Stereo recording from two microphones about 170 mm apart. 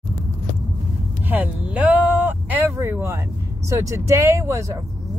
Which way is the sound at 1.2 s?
10° right (ahead or behind).